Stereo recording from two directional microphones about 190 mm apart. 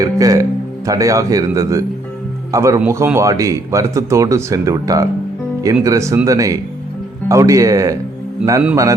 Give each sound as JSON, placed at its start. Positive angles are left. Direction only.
{"t": 0.0, "sound": "a man's voice", "side_deg": -20}